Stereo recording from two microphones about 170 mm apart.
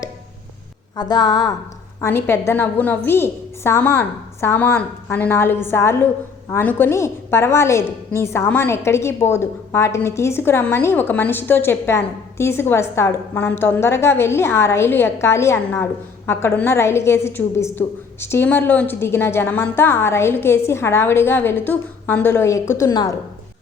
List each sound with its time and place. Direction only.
0.9 s speech: 25° left (ahead or behind)
2.0 s a woman's voice: 15° left (ahead or behind)